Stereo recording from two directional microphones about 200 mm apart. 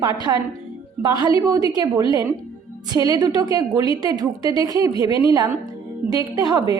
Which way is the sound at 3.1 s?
20° right (ahead or behind).